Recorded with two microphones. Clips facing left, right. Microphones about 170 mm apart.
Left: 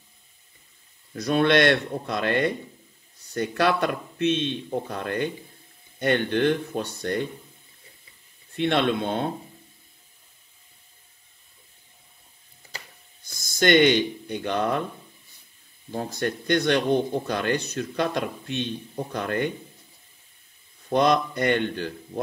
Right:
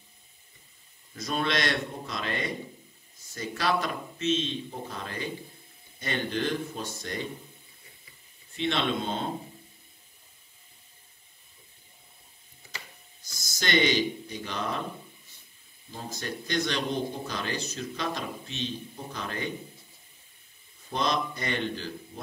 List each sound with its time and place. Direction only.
1.1 s speech: 65° left (ahead or behind)
8.5 s speech: 60° left (ahead or behind)
13.2 s speech: 55° left (ahead or behind)
15.9 s speech: 60° left (ahead or behind)
20.9 s speech: 60° left (ahead or behind)